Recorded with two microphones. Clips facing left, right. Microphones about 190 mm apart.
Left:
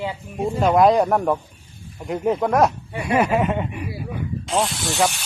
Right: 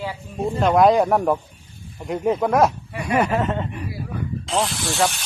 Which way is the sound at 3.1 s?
10° left (ahead or behind).